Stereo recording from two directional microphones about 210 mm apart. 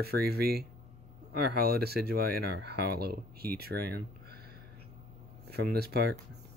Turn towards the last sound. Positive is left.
turn(degrees=-50)  # may be behind; listen again after turning